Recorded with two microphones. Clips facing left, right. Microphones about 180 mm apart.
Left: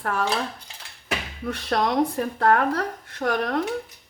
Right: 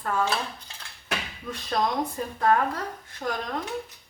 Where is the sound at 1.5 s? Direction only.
70° left (ahead or behind).